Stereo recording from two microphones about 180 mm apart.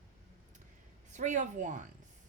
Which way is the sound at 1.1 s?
40° right (ahead or behind).